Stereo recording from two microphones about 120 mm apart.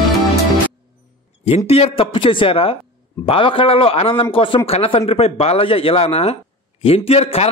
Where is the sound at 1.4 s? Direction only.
60° left (ahead or behind).